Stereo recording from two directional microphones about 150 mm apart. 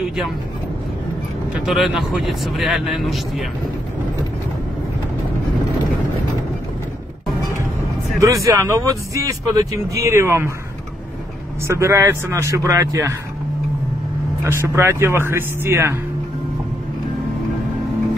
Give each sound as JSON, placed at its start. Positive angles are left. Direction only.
{"t": 1.5, "sound": "a man's voice", "side_deg": -5}
{"t": 8.5, "sound": "speech", "side_deg": -20}
{"t": 11.6, "sound": "speech", "side_deg": -20}
{"t": 14.4, "sound": "speech", "side_deg": -15}